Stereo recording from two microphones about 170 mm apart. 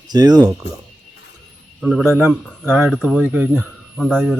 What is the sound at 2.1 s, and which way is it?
Speech, 15° right (ahead or behind).